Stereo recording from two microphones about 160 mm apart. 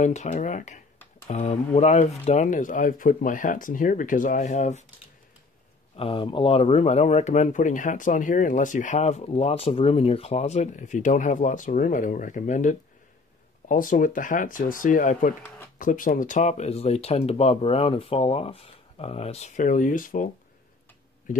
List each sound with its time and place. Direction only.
0.0 s speech: 45° left (ahead or behind)
5.9 s speech: 35° left (ahead or behind); by 20.2 s 55° left (ahead or behind)